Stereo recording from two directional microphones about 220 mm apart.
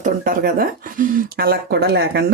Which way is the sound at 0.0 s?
40° right (ahead or behind).